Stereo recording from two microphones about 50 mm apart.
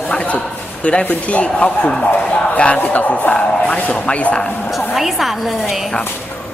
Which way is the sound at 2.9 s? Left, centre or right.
Left.